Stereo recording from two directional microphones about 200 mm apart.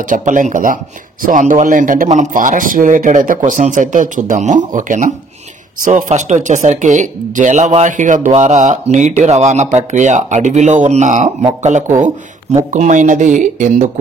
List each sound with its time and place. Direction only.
0.0 s speech: 40° right (ahead or behind)